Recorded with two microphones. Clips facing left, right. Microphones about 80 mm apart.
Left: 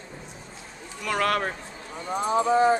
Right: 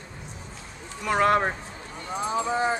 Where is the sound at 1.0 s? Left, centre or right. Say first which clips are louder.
Right 4 dB; right.